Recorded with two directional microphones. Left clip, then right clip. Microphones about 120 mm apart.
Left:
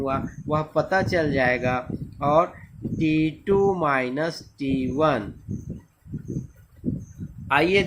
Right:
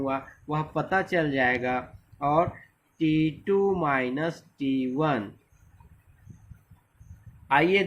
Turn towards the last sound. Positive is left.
turn(degrees=20)  # may be behind; listen again after turning